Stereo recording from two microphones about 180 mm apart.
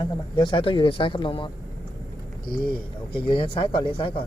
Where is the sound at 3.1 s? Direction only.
30° left (ahead or behind).